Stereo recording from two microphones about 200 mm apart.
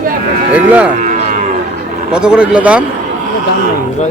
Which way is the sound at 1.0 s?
40° right (ahead or behind).